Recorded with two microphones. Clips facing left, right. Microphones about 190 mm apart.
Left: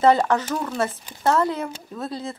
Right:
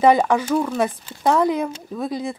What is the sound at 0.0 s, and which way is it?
Speech, 15° right (ahead or behind).